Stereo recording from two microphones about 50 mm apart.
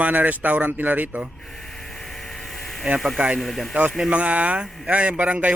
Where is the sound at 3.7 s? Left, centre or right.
Right.